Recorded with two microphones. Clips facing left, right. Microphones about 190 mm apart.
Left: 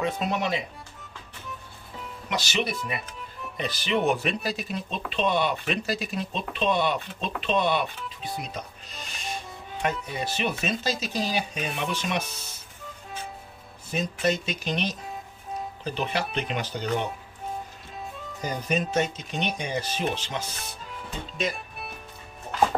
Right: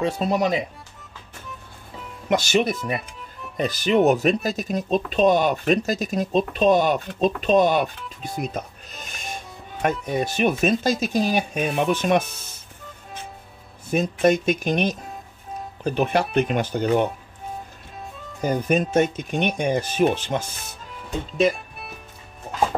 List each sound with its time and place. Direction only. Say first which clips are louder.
0.2 s speech: right 6 dB; 40° right (ahead or behind)
2.2 s speech: right 8 dB; 50° right (ahead or behind)
13.8 s speech: right 7 dB; 55° right (ahead or behind)
17.9 s music: even; centre (ahead or behind)
18.4 s speech: right 7 dB; 55° right (ahead or behind)